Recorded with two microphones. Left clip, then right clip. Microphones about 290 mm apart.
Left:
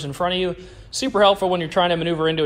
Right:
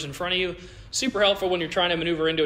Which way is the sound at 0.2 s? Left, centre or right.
Left.